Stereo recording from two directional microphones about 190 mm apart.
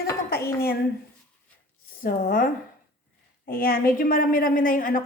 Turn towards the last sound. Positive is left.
turn(degrees=45)  # may be behind; listen again after turning